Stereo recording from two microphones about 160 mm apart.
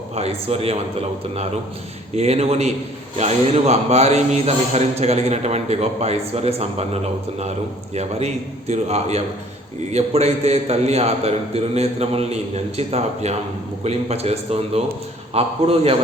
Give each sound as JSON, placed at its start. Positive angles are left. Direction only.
{"t": 0.2, "sound": "a man's voice", "side_deg": -40}
{"t": 2.1, "sound": "a man's voice", "side_deg": -40}